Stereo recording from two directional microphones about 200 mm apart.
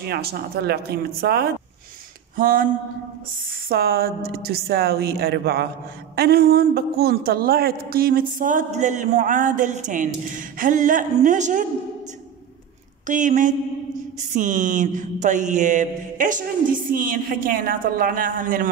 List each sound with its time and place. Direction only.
0.0 s a woman's voice: 50° right (ahead or behind)
7.9 s mantra: 50° right (ahead or behind)
13.0 s mantra: 40° right (ahead or behind)